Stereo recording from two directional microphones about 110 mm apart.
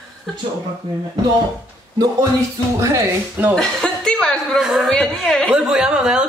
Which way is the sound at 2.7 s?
30° right (ahead or behind).